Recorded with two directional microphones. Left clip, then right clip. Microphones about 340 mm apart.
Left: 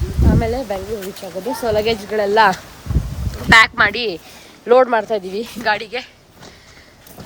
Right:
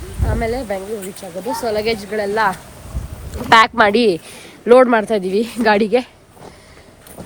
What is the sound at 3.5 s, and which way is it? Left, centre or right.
Speech, centre.